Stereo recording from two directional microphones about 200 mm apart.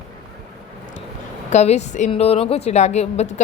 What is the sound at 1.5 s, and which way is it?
A woman's voice, 35° left (ahead or behind).